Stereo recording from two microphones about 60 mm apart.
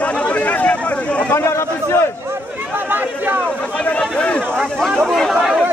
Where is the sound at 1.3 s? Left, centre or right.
Left.